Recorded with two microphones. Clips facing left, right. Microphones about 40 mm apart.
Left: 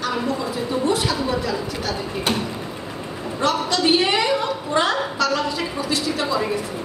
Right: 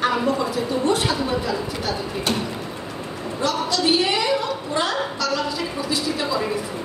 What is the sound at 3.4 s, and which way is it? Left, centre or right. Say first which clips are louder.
A woman's voice: left 2 dB; left.